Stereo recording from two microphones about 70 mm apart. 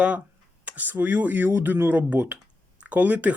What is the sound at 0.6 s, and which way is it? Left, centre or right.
Speech, right.